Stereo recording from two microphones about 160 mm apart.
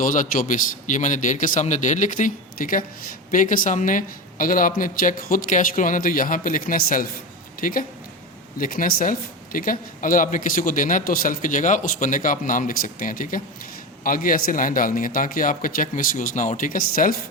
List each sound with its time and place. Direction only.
0.0 s a man's voice: 55° left (ahead or behind)